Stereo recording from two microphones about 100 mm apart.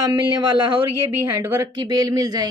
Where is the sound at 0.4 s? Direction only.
55° right (ahead or behind).